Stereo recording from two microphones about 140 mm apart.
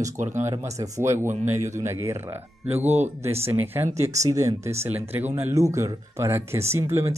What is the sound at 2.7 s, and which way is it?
Speech, 50° right (ahead or behind).